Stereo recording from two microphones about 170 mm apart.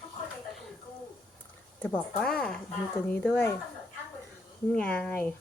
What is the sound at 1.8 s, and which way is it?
A woman's voice, 10° left (ahead or behind).